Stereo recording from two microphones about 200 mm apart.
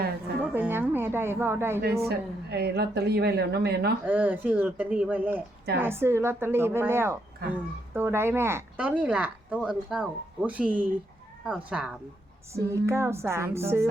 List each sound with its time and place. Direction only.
0.4 s a woman's voice: 5° right (ahead or behind)
1.8 s speech: 50° right (ahead or behind)
4.0 s speech: 5° right (ahead or behind)
7.4 s speech: 50° right (ahead or behind)
7.9 s speech: 10° right (ahead or behind)